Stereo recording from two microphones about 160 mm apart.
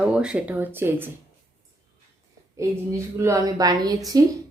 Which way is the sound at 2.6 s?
20° right (ahead or behind).